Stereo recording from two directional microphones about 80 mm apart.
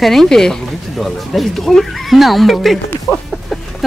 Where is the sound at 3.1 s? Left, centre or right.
Centre.